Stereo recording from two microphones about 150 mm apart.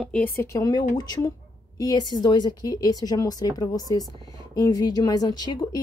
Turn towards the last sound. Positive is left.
turn(degrees=25)  # may be behind; listen again after turning